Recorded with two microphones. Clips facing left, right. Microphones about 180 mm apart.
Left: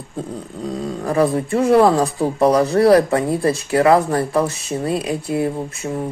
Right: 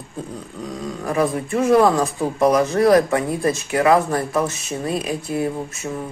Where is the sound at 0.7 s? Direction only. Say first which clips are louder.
Left 4 dB; 30° left (ahead or behind).